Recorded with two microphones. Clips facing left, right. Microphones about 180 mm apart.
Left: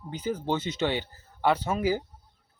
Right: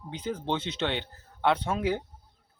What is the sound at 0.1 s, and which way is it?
Speech, 5° left (ahead or behind).